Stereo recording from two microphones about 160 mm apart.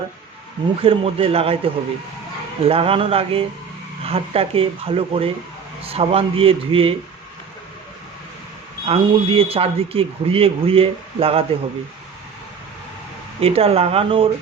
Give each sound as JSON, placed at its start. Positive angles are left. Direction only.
{"t": 0.8, "sound": "a man's voice", "side_deg": -35}
{"t": 8.9, "sound": "a man's voice", "side_deg": -35}
{"t": 13.4, "sound": "a man's voice", "side_deg": -40}